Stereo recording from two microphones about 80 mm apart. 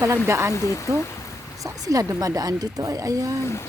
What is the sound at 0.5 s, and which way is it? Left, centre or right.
Speech, left.